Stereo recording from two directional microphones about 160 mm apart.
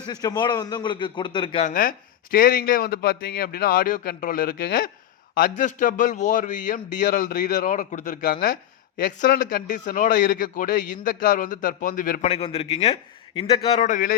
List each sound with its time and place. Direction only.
0.1 s a man's voice: 25° left (ahead or behind)
1.6 s a man's voice: 60° left (ahead or behind)
12.2 s a man's voice: 40° left (ahead or behind); by 14.2 s 55° left (ahead or behind)